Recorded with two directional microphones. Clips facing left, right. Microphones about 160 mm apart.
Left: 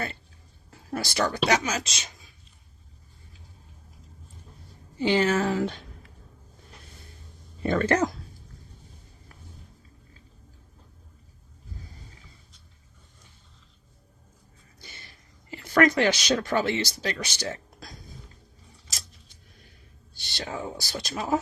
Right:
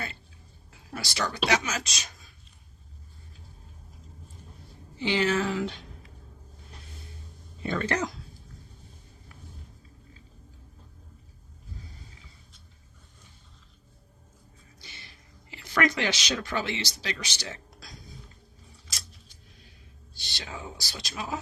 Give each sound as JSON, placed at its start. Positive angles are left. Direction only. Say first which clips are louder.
{"t": 0.7, "sound": "speech", "louder": "left 7 dB", "side_deg": 50}
{"t": 1.7, "sound": "speech", "louder": "left 3 dB", "side_deg": 25}
{"t": 4.9, "sound": "speech", "louder": "left 3 dB", "side_deg": 45}
{"t": 7.6, "sound": "speech", "louder": "left 6 dB", "side_deg": 50}
{"t": 14.8, "sound": "a sound", "louder": "left 2 dB", "side_deg": 50}
{"t": 20.4, "sound": "speech", "louder": "left 7 dB", "side_deg": 50}